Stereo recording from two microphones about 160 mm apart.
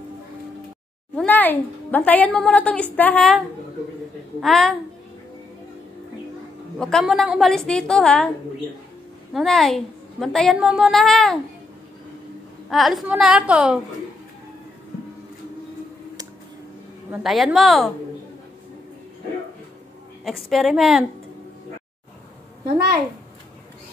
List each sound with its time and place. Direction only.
1.1 s a woman's voice: 10° left (ahead or behind)
6.8 s a woman's voice: 5° left (ahead or behind)
9.3 s a woman's voice: centre (ahead or behind)
12.6 s a woman's voice: centre (ahead or behind)
17.2 s a woman's voice: centre (ahead or behind)
20.2 s a woman's voice: centre (ahead or behind)